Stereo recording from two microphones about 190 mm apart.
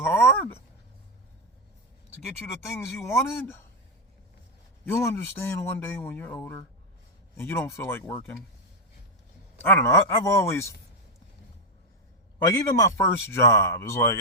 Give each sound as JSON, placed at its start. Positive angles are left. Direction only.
{"t": 0.0, "sound": "a sound", "side_deg": 10}
{"t": 2.7, "sound": "speech", "side_deg": 15}
{"t": 4.9, "sound": "speech", "side_deg": 15}
{"t": 9.6, "sound": "speech", "side_deg": 10}
{"t": 12.5, "sound": "speech", "side_deg": 15}